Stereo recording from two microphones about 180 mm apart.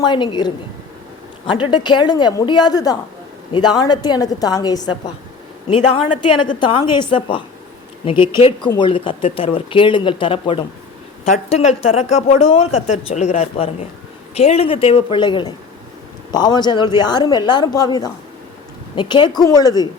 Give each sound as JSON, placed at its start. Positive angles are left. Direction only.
{"t": 0.0, "sound": "speech", "side_deg": 25}
{"t": 6.6, "sound": "speech", "side_deg": 25}